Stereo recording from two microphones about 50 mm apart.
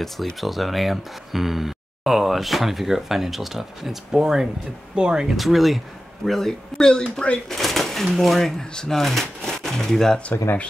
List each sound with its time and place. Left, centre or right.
0.0 s speech: centre
5.3 s speech: centre